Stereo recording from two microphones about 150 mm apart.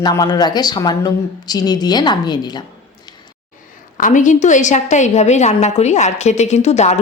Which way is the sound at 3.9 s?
60° left (ahead or behind).